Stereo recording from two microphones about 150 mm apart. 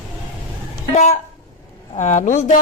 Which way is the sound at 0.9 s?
50° left (ahead or behind).